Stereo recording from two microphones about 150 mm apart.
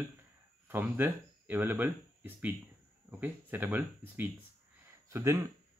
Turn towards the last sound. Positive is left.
turn(degrees=-20)  # may be behind; listen again after turning